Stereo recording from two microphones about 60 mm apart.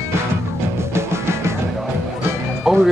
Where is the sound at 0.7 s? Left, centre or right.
Right.